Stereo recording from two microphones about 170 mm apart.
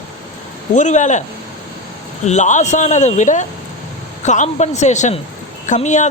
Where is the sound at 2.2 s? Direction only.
45° left (ahead or behind).